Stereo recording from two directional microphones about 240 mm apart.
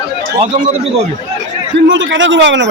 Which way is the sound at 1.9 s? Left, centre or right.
Right.